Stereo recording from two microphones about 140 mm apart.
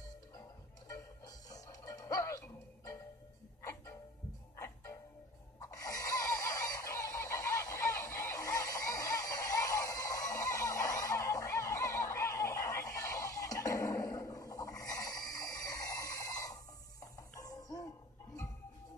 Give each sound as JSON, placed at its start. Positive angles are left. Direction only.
{"t": 0.8, "sound": "music", "side_deg": 25}
{"t": 4.6, "sound": "music", "side_deg": 20}
{"t": 5.7, "sound": "fowl", "side_deg": 25}
{"t": 17.0, "sound": "music", "side_deg": 25}